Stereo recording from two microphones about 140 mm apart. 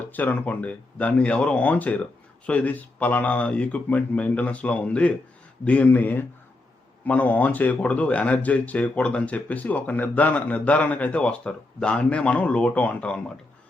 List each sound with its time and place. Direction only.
0.0 s speech: 10° left (ahead or behind)